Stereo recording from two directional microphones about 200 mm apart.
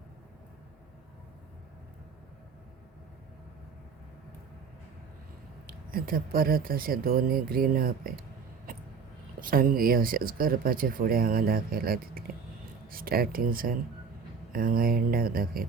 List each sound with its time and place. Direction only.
5.6 s speech: 45° right (ahead or behind)
8.7 s a sound: 45° right (ahead or behind)
9.4 s speech: 45° right (ahead or behind)